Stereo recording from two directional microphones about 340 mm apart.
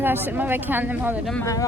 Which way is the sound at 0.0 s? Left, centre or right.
Centre.